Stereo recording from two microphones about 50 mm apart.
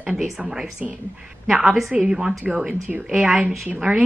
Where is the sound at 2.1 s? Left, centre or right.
Centre.